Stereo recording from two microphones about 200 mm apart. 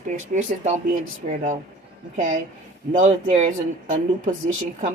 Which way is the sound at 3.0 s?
35° right (ahead or behind).